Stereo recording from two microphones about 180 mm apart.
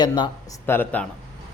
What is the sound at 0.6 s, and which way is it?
Speech, 10° left (ahead or behind).